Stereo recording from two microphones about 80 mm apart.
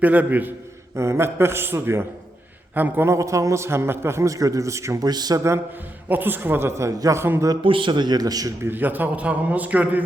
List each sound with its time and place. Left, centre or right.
0.0 s a man's voice: centre
0.9 s a man's voice: right
5.0 s speech: right
6.1 s a man's voice: right
7.6 s speech: right
8.6 s a man's voice: right